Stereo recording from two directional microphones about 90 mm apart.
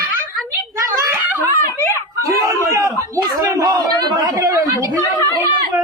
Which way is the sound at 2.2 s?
35° right (ahead or behind).